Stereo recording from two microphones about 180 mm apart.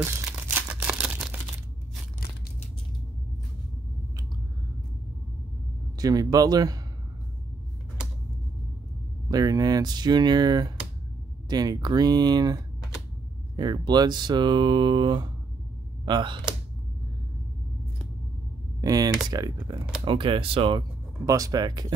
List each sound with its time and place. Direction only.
0.0 s crumpling: 15° right (ahead or behind)
5.9 s speech: 20° right (ahead or behind)
9.3 s speech: 20° right (ahead or behind)
13.6 s speech: 25° right (ahead or behind)
18.8 s speech: 20° right (ahead or behind)
21.3 s speech: 20° right (ahead or behind)